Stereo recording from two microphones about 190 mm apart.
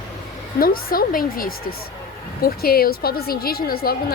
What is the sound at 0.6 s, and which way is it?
A woman's voice, 50° left (ahead or behind).